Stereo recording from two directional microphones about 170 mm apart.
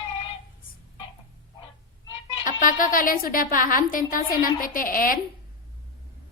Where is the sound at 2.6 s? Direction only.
50° left (ahead or behind).